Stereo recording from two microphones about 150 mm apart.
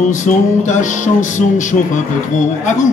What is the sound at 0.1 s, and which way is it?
Music, 55° left (ahead or behind).